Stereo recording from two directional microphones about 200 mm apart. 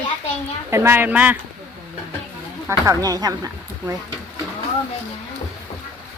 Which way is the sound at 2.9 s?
20° right (ahead or behind).